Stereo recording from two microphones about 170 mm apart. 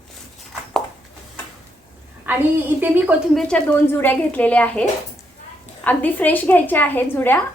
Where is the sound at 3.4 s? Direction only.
5° left (ahead or behind).